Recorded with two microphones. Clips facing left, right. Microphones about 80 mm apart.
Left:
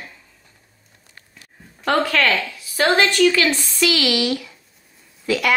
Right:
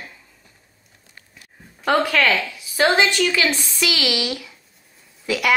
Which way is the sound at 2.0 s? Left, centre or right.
Centre.